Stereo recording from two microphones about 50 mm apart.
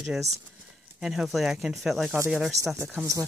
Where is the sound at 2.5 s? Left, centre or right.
Right.